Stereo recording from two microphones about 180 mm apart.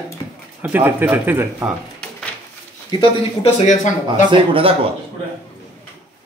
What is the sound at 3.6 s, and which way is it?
Speech, 45° left (ahead or behind).